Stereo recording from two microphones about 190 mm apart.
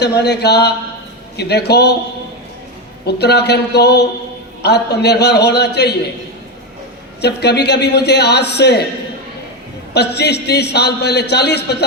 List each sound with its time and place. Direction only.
0.0 s a man's voice: 60° left (ahead or behind)
3.1 s a man's voice: 60° left (ahead or behind)
7.2 s a man's voice: 60° left (ahead or behind)
9.9 s a man's voice: 60° left (ahead or behind)